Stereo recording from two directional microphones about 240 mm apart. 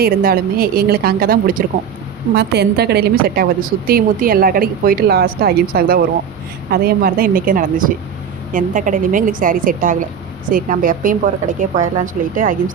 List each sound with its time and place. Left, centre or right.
0.0 s a woman's voice: right